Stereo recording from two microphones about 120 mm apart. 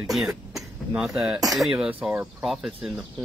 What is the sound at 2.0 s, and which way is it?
Speech, 15° right (ahead or behind).